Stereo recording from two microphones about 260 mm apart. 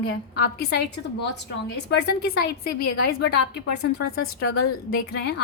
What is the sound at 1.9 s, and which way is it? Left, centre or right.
Speech, left.